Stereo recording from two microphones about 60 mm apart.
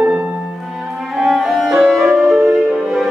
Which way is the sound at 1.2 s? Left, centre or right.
Centre.